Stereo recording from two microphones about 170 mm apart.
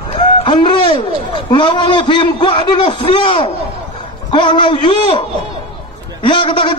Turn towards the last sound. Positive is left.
turn(degrees=30)  # may be behind; listen again after turning